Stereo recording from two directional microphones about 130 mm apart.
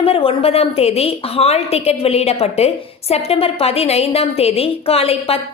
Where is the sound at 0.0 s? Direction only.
45° left (ahead or behind).